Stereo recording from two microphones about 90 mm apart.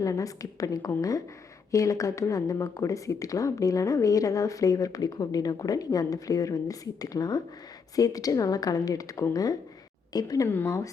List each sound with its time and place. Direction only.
0.0 s a woman's voice: 40° left (ahead or behind)
10.5 s speech: 25° left (ahead or behind)